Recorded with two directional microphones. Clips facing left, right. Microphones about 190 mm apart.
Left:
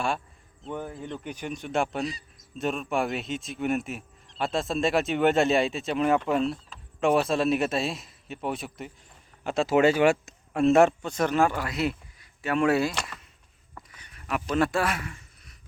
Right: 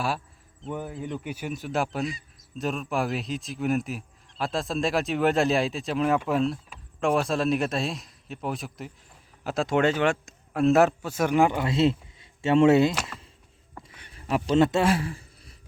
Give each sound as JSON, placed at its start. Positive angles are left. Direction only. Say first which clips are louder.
{"t": 0.6, "sound": "speech", "louder": "right 2 dB", "side_deg": -5}
{"t": 10.5, "sound": "a man's voice", "louder": "left 1 dB", "side_deg": 0}
{"t": 13.7, "sound": "a sound", "louder": "right 3 dB", "side_deg": -25}